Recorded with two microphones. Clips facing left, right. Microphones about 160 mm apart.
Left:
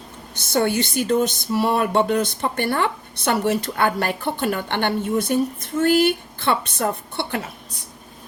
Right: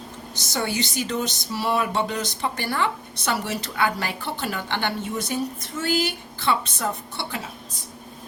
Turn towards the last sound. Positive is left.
turn(degrees=60)  # may be behind; listen again after turning